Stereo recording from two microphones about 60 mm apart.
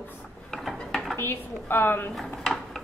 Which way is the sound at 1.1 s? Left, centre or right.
Left.